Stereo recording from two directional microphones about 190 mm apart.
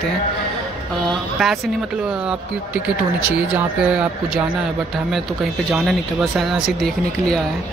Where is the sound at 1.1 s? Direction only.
Centre (ahead or behind).